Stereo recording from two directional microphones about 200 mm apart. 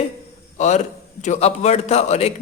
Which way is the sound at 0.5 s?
35° left (ahead or behind).